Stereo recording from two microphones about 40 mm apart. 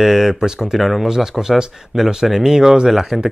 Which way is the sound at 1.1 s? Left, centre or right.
Centre.